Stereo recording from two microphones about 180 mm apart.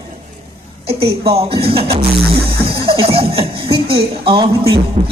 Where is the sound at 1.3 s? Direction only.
30° right (ahead or behind).